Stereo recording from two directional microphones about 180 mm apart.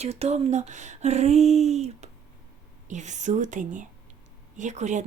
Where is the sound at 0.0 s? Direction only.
35° right (ahead or behind).